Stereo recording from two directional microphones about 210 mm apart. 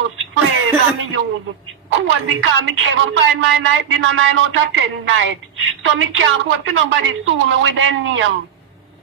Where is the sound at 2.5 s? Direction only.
65° right (ahead or behind).